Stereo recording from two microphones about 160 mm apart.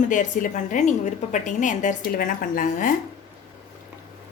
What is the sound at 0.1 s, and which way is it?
A woman's voice, 55° left (ahead or behind).